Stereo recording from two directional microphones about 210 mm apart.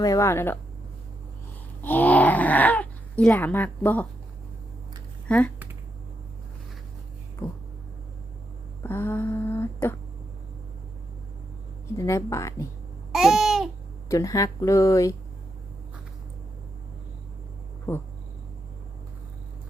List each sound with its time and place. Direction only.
0.0 s speech: 15° left (ahead or behind)
1.8 s speech: 10° left (ahead or behind)
8.8 s a sound: 10° left (ahead or behind)
11.9 s speech: 15° left (ahead or behind)
13.1 s babbling: centre (ahead or behind)
14.1 s speech: 15° left (ahead or behind)